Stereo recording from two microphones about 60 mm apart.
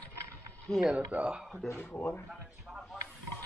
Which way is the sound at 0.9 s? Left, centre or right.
Right.